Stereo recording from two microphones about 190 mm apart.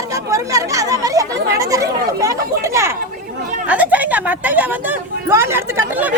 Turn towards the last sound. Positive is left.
turn(degrees=-10)  # may be behind; listen again after turning